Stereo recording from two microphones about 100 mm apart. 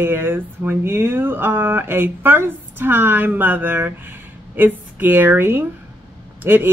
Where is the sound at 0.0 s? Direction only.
20° right (ahead or behind).